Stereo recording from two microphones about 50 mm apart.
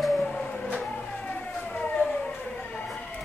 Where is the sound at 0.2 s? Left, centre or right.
Left.